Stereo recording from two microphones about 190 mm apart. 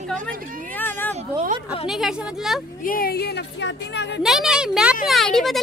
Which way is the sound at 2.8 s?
50° left (ahead or behind).